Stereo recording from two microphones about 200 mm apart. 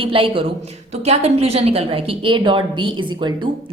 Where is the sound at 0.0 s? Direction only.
25° right (ahead or behind).